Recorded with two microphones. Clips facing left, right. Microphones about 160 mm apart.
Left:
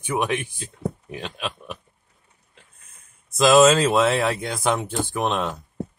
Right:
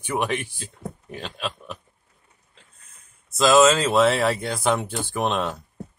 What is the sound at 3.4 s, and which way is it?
Speech, centre (ahead or behind).